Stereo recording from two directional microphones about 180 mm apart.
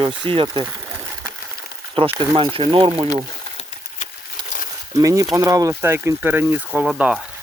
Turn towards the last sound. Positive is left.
turn(degrees=-5)  # may be behind; listen again after turning